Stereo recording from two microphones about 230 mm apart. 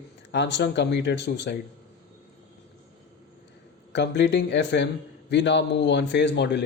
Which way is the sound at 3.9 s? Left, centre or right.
Left.